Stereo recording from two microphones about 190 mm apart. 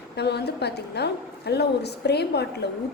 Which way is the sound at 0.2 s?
60° left (ahead or behind).